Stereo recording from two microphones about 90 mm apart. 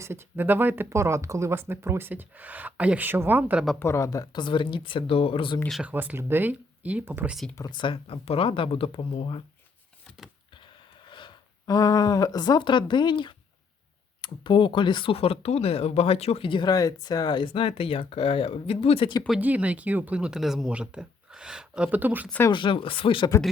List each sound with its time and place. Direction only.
0.0 s speech: 25° right (ahead or behind)
3.8 s speech: 30° left (ahead or behind)
4.3 s speech: 60° left (ahead or behind); by 5.5 s 80° left
5.8 s speech: 20° right (ahead or behind)
7.7 s speech: 65° left (ahead or behind)
11.6 s speech: 40° left (ahead or behind); by 16.6 s 80° left
16.6 s speech: 45° left (ahead or behind); by 19.1 s 90° left
19.4 s speech: 15° right (ahead or behind)
22.5 s speech: 70° left (ahead or behind)